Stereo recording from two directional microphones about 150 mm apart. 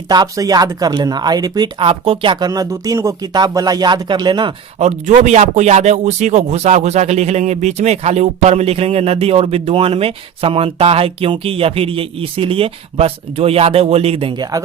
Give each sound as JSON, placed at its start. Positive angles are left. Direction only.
{"t": 0.1, "sound": "speech", "side_deg": -25}
{"t": 4.8, "sound": "a man's voice", "side_deg": -50}